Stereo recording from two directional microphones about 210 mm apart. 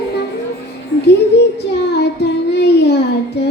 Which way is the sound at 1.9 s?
50° left (ahead or behind).